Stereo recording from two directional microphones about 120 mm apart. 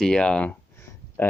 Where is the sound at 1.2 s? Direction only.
15° left (ahead or behind).